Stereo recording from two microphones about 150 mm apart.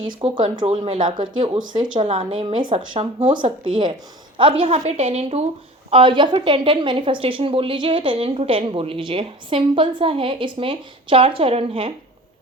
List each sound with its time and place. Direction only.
0.2 s a woman's voice: 30° right (ahead or behind)